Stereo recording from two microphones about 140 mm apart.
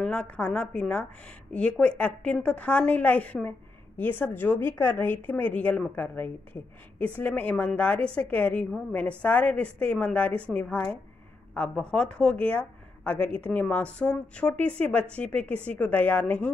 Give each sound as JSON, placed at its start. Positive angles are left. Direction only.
{"t": 0.0, "sound": "a woman's voice", "side_deg": 5}